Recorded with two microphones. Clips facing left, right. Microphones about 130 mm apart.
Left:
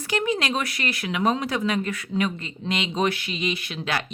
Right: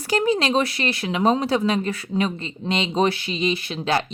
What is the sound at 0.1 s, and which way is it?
Speech, 35° right (ahead or behind).